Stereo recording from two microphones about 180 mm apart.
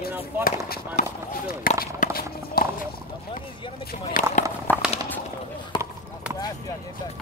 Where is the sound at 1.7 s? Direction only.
55° left (ahead or behind).